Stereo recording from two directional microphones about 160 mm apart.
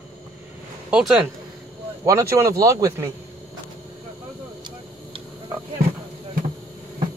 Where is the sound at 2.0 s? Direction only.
20° right (ahead or behind).